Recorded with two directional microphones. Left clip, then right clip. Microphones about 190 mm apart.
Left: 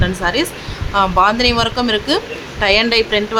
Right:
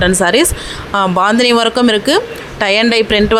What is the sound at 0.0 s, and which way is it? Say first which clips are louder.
Speech: right 7 dB; 35° right (ahead or behind).